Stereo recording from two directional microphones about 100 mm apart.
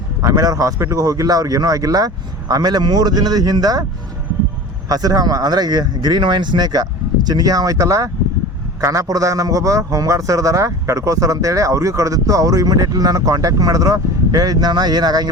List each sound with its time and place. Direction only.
0.2 s a man's voice: 35° right (ahead or behind)
4.9 s a man's voice: 40° right (ahead or behind)